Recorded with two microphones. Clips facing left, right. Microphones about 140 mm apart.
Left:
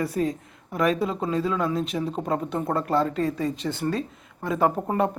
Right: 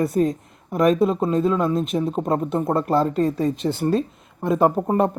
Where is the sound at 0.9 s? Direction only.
50° right (ahead or behind).